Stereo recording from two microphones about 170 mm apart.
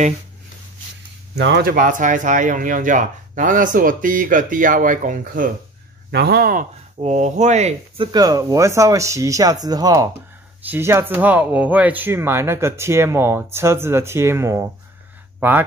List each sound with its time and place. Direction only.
1.4 s speech: 75° right (ahead or behind); by 5.5 s 55° right (ahead or behind)
6.1 s speech: 70° right (ahead or behind)
7.0 s speech: 40° right (ahead or behind)
8.1 s speech: 20° right (ahead or behind)